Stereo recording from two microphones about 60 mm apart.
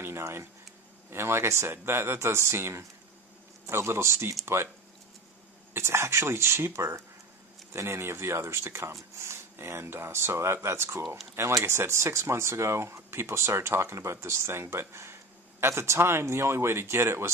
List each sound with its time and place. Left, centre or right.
0.0 s a sound: right
1.1 s speech: right
5.7 s speech: right